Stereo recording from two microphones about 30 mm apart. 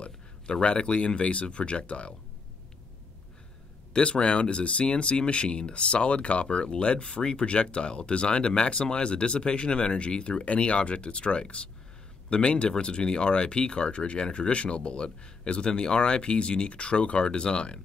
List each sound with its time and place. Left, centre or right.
0.0 s speech: left
3.9 s speech: left